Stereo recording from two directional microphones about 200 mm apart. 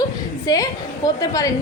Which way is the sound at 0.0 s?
20° left (ahead or behind).